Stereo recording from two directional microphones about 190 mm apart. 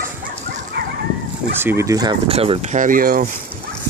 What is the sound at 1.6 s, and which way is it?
Speech, 15° right (ahead or behind).